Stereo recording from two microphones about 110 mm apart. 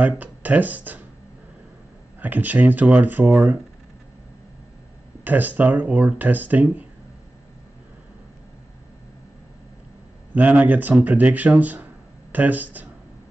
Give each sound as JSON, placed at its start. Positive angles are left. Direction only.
{"t": 0.0, "sound": "speech", "side_deg": -15}
{"t": 2.1, "sound": "speech", "side_deg": -15}
{"t": 5.2, "sound": "speech", "side_deg": -15}
{"t": 10.3, "sound": "speech", "side_deg": -15}